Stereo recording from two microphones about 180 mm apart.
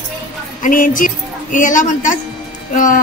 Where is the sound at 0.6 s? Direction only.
50° left (ahead or behind).